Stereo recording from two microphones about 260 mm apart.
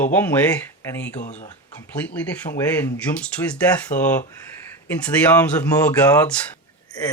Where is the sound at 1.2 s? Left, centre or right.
Left.